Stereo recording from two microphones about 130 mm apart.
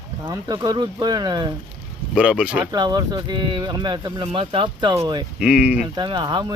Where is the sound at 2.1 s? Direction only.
5° right (ahead or behind).